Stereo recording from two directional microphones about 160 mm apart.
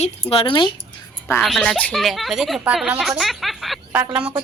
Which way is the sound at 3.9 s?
10° right (ahead or behind).